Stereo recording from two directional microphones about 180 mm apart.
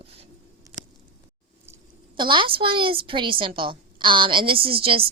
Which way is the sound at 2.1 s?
25° right (ahead or behind).